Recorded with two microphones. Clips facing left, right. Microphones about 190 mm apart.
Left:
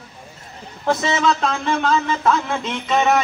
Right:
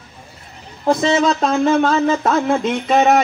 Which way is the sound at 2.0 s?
40° right (ahead or behind).